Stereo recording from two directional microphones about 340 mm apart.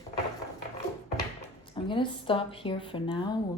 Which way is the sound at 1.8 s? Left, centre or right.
Centre.